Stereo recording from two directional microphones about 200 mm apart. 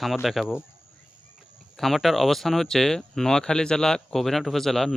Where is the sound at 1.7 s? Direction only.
Centre (ahead or behind).